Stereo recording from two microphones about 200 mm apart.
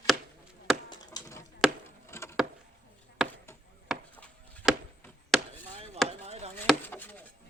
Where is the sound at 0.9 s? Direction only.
20° left (ahead or behind).